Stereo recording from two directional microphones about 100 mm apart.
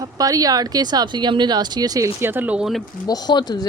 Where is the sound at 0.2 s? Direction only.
40° right (ahead or behind); by 2.6 s 15° right (ahead or behind).